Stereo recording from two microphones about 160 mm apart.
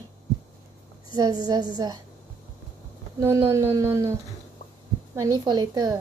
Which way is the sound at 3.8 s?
20° right (ahead or behind).